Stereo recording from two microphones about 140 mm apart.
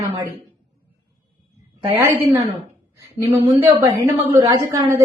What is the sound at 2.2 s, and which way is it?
A woman's voice, 20° right (ahead or behind).